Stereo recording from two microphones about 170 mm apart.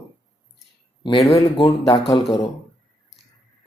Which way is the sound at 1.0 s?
25° left (ahead or behind).